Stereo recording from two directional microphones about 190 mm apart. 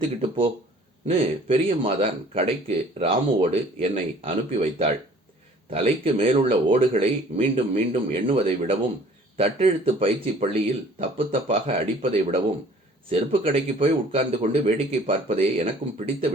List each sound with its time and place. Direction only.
0.2 s a man's voice: 30° right (ahead or behind)